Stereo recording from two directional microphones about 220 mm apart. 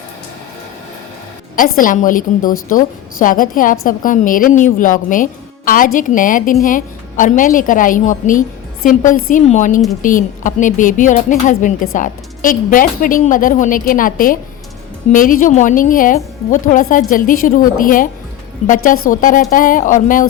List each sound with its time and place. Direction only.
1.5 s a woman's voice: 40° left (ahead or behind)